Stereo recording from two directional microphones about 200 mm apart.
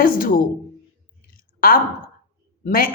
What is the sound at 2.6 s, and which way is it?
Speech, 45° left (ahead or behind).